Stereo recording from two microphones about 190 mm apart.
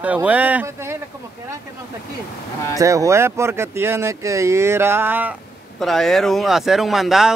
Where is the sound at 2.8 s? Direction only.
15° right (ahead or behind).